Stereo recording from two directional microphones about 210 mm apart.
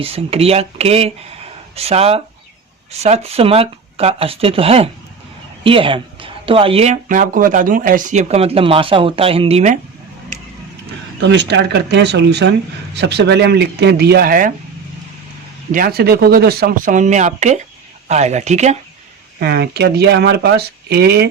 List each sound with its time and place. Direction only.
0.0 s speech: 30° right (ahead or behind)
3.2 s speech: 30° right (ahead or behind)
11.2 s speech: 55° right (ahead or behind)
15.7 s speech: 45° right (ahead or behind)
19.4 s speech: 50° right (ahead or behind)